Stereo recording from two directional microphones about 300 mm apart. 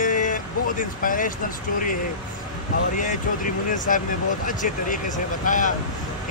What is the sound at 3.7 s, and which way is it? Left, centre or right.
Speech, left.